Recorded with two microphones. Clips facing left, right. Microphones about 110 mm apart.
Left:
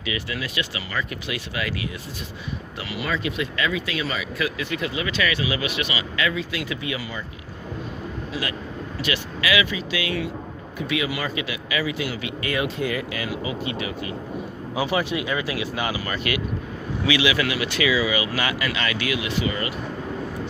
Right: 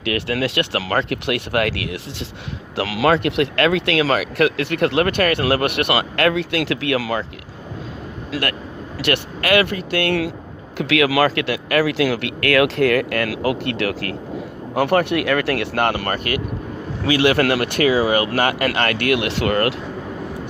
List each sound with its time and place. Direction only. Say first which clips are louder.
0.0 s speech: right 8 dB; 70° right (ahead or behind)
2.7 s speech: right 12 dB; 90° right
8.3 s speech: right 8 dB; 70° right (ahead or behind)
14.8 s speech: right 7 dB; 60° right (ahead or behind)